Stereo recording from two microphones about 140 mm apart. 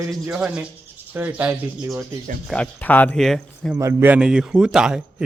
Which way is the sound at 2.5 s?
10° left (ahead or behind).